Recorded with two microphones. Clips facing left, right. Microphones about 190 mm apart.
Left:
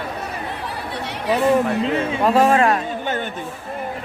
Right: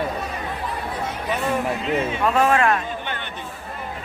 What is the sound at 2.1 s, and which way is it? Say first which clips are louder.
A man's voice: left 4 dB; 35° left (ahead or behind).